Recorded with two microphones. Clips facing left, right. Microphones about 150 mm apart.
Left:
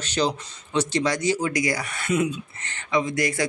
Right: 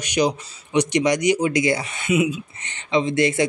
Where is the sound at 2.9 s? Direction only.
25° right (ahead or behind).